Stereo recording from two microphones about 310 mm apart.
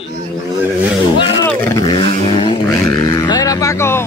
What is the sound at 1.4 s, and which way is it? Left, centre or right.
Vehicle, centre.